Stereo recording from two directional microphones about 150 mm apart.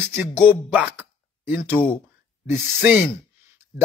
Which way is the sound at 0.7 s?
10° right (ahead or behind).